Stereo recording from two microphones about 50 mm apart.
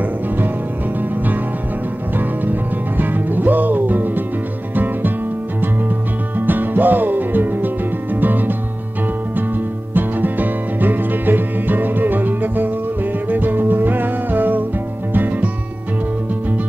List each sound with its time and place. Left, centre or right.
3.0 s music: right
6.3 s music: right
9.9 s music: right